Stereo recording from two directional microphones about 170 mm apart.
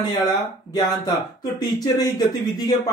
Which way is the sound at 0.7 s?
20° left (ahead or behind).